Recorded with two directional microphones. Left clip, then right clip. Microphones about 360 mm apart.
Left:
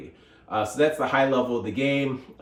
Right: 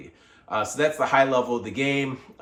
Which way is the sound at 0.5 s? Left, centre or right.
Right.